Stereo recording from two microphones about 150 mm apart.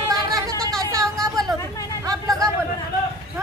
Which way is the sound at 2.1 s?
25° right (ahead or behind).